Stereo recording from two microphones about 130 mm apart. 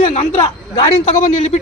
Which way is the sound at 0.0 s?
55° left (ahead or behind).